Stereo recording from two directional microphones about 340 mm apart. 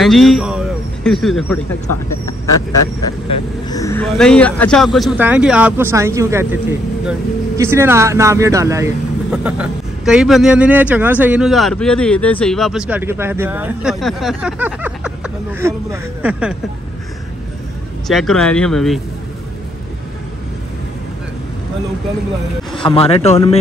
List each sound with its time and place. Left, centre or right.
0.0 s speech: centre
1.9 s speech: left
3.6 s speech: centre
18.0 s speech: centre
22.7 s a man's voice: centre